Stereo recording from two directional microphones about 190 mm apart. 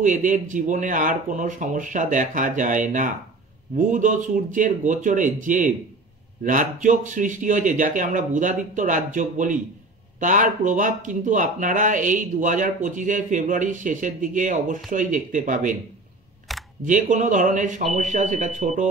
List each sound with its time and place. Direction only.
0.0 s speech: 40° right (ahead or behind)
16.5 s camera: centre (ahead or behind)
16.8 s speech: 40° right (ahead or behind)